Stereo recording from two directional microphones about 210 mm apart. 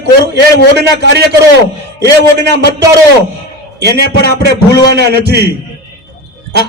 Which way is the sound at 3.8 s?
50° right (ahead or behind).